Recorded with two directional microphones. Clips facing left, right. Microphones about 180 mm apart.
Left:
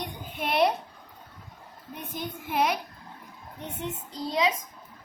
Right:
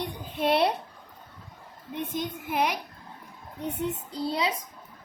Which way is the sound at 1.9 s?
25° right (ahead or behind).